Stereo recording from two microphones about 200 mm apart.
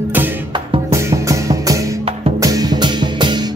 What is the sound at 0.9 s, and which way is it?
Music, 15° right (ahead or behind).